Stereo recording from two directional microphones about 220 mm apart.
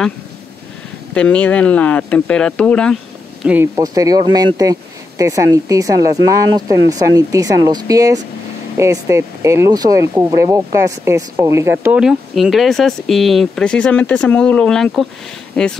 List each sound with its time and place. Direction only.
1.1 s speech: 5° left (ahead or behind)
3.4 s speech: 10° right (ahead or behind)